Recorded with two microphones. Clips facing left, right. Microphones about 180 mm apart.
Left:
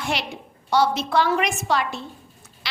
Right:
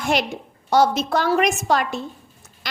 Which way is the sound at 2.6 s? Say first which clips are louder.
Right 3 dB; 45° right (ahead or behind).